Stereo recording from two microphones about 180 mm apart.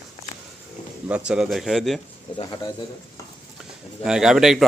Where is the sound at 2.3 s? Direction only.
25° left (ahead or behind).